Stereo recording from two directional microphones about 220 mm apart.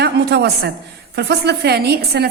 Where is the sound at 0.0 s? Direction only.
50° right (ahead or behind).